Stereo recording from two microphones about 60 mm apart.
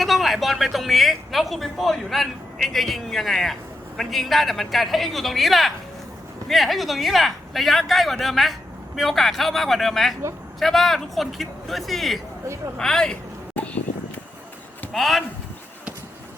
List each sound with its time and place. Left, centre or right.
0.0 s speech: centre
13.6 s a sound: left
14.9 s speech: centre